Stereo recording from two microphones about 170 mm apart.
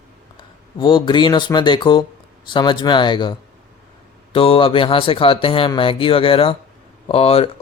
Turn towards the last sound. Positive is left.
turn(degrees=35)  # may be behind; listen again after turning